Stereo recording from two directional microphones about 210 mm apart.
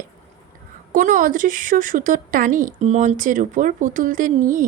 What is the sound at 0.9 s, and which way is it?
Speech, 40° right (ahead or behind).